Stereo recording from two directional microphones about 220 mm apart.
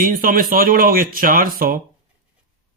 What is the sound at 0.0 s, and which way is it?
Speech, 40° right (ahead or behind).